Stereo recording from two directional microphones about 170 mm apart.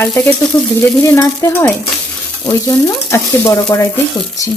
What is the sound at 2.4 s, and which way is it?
Stir, 20° left (ahead or behind).